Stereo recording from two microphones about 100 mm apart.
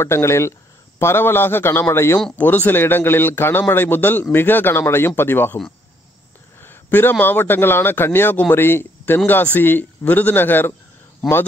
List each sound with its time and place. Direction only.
0.0 s a man's voice: 25° left (ahead or behind)
2.3 s a man's voice: 15° left (ahead or behind)
6.6 s a man's voice: 20° left (ahead or behind)